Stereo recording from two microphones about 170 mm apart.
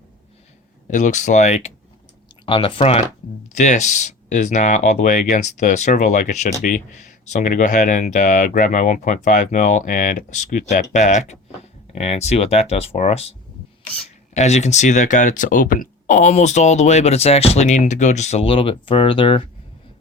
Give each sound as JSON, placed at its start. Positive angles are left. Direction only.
{"t": 0.9, "sound": "speech", "side_deg": 45}
{"t": 2.5, "sound": "speech", "side_deg": 30}
{"t": 14.3, "sound": "speech", "side_deg": 40}